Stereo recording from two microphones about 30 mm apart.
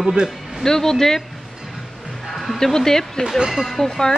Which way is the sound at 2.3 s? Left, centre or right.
Centre.